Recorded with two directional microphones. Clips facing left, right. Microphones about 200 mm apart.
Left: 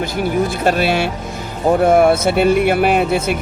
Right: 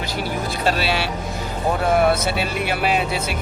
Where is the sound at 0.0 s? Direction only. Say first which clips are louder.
Left 8 dB; 50° left (ahead or behind).